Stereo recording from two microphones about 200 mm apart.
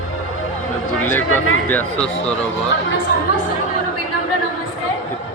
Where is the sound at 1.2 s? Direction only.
90° left.